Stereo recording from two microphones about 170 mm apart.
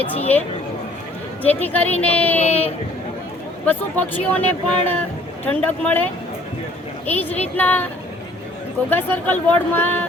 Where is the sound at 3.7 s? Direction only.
10° left (ahead or behind).